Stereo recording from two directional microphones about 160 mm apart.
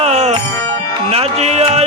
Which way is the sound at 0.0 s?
45° right (ahead or behind).